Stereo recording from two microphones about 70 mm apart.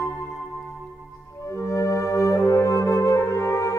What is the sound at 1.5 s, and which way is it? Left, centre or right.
Music, left.